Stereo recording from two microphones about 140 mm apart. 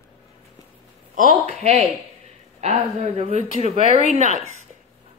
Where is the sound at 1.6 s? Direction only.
50° right (ahead or behind).